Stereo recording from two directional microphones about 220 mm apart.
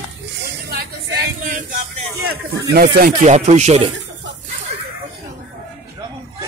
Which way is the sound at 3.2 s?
30° right (ahead or behind).